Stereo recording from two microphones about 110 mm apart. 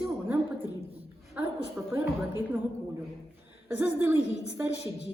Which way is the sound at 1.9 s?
20° right (ahead or behind).